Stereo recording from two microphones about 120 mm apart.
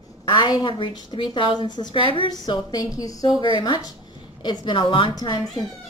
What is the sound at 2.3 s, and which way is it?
A woman's voice, 35° left (ahead or behind).